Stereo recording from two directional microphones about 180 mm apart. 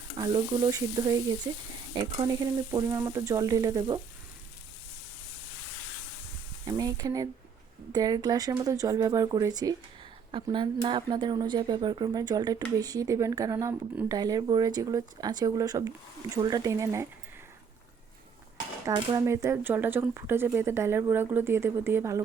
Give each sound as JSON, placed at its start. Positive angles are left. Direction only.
{"t": 0.2, "sound": "speech", "side_deg": -20}
{"t": 6.7, "sound": "speech", "side_deg": -20}
{"t": 18.9, "sound": "speech", "side_deg": -20}